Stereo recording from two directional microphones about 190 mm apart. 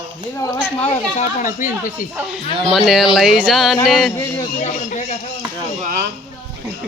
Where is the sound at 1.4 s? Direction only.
45° left (ahead or behind).